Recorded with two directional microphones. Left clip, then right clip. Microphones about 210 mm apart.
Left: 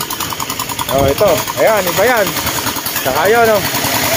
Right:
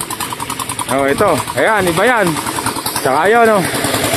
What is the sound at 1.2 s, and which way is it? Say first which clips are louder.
Speech: left 1 dB; 50° right (ahead or behind).